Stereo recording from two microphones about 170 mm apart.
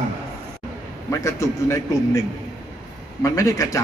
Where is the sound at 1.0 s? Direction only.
15° left (ahead or behind).